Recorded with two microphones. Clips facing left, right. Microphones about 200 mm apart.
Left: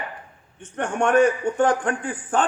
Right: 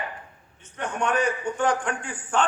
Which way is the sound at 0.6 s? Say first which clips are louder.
Left 5 dB; 50° left (ahead or behind).